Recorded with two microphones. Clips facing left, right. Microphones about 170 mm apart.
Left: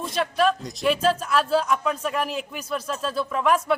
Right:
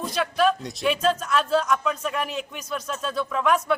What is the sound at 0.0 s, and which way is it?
Speech, centre (ahead or behind).